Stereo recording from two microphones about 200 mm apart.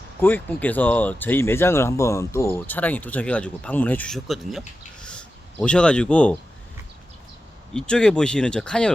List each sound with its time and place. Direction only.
0.2 s speech: 10° left (ahead or behind)
5.0 s a sound: 5° left (ahead or behind)
7.7 s speech: 5° left (ahead or behind)